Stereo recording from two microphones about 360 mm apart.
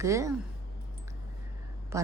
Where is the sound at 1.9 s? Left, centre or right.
Centre.